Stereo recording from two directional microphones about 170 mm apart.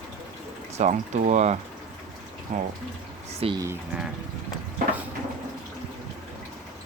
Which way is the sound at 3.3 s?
35° right (ahead or behind).